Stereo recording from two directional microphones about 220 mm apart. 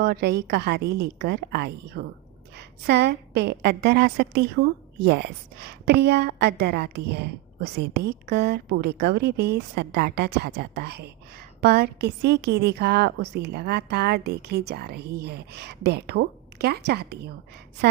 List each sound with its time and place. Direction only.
0.0 s a woman's voice: 50° right (ahead or behind)